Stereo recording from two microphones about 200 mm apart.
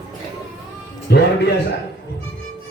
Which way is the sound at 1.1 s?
55° left (ahead or behind).